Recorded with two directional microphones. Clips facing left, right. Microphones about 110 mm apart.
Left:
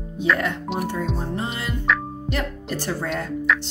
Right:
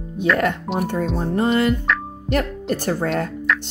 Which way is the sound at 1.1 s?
55° right (ahead or behind).